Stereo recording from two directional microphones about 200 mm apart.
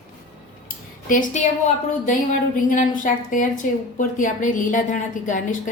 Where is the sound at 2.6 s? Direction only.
40° left (ahead or behind).